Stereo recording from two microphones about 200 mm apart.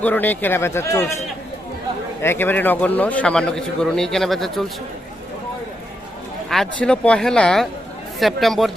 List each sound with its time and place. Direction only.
0.0 s speech: 10° left (ahead or behind)
2.2 s a man's voice: 10° left (ahead or behind)
6.5 s a man's voice: 5° left (ahead or behind)